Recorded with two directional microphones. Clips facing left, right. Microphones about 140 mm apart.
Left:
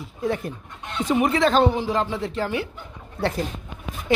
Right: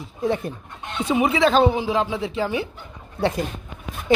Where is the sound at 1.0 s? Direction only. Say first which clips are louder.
Right 1 dB; 10° right (ahead or behind).